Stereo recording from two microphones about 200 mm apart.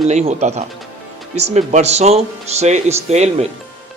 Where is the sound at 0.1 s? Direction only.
35° right (ahead or behind).